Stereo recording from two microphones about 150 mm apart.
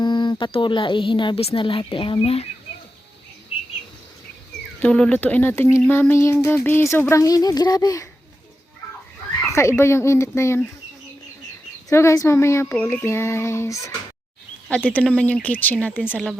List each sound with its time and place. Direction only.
0.0 s speech: 30° left (ahead or behind)
4.8 s speech: 5° left (ahead or behind); by 8.0 s 25° left (ahead or behind)
9.5 s speech: 20° left (ahead or behind)
11.9 s speech: 20° left (ahead or behind)
14.8 s a woman's voice: 10° left (ahead or behind)